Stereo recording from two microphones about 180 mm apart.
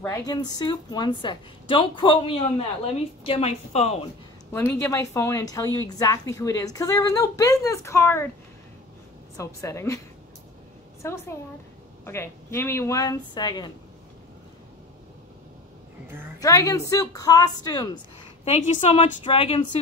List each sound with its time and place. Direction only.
0.0 s a woman's voice: 20° left (ahead or behind); by 4.1 s 35° left (ahead or behind)
4.5 s a woman's voice: 10° left (ahead or behind)
9.4 s a woman's voice: 15° left (ahead or behind)
11.0 s a woman's voice: 15° left (ahead or behind)
16.3 s a woman's voice: 20° left (ahead or behind)
18.4 s a woman's voice: 40° left (ahead or behind)